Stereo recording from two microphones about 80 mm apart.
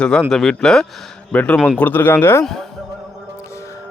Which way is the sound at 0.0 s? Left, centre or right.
Centre.